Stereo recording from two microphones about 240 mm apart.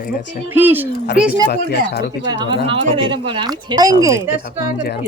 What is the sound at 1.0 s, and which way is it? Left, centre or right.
Speech, left.